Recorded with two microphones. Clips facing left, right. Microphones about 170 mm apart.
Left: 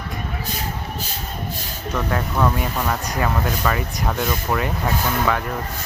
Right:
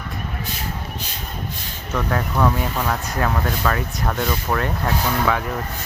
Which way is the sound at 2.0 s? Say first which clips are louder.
Right 1 dB; centre (ahead or behind).